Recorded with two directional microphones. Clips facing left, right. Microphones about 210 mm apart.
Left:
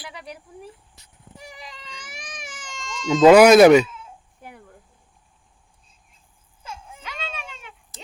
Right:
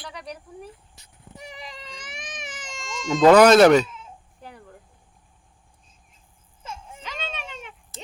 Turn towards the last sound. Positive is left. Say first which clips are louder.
# right 1 dB
turn(degrees=5)  # may be behind; listen again after turning